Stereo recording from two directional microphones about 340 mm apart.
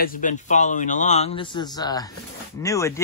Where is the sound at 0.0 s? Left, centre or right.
Left.